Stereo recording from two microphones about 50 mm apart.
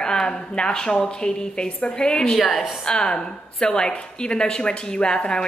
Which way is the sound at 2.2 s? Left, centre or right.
Centre.